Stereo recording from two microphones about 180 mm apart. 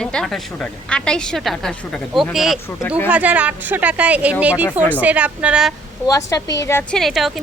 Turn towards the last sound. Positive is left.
turn(degrees=0)  # may be behind; listen again after turning